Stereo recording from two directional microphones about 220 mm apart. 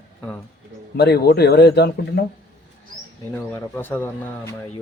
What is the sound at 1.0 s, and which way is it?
Speech, 45° left (ahead or behind).